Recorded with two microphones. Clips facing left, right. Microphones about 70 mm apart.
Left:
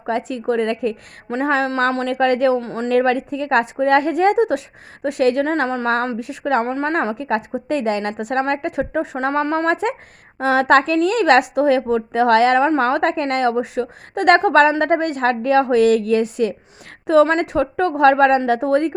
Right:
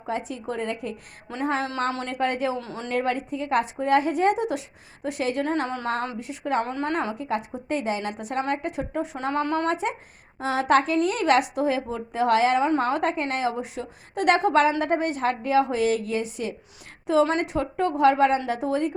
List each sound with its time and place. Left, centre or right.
0.0 s a woman's voice: left
1.6 s a woman's voice: left
2.0 s a woman's voice: left
2.6 s speech: left
2.9 s a woman's voice: left
6.1 s a woman's voice: left
6.7 s a woman's voice: left
6.9 s a woman's voice: left
9.2 s a woman's voice: left
9.6 s a woman's voice: left